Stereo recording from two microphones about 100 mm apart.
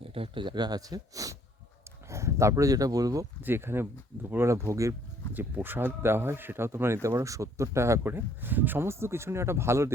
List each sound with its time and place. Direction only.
0.0 s speech: 70° right (ahead or behind); by 3.2 s 35° right (ahead or behind)
3.4 s speech: 25° right (ahead or behind)
5.3 s speech: 20° right (ahead or behind)